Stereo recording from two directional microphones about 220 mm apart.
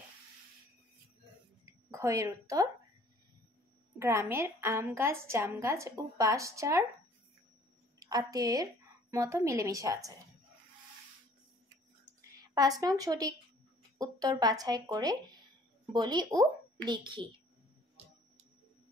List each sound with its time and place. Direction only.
1.7 s a woman's voice: 15° right (ahead or behind)
4.0 s a woman's voice: 10° right (ahead or behind)
8.0 s a woman's voice: 15° right (ahead or behind)
12.2 s a woman's voice: 15° right (ahead or behind)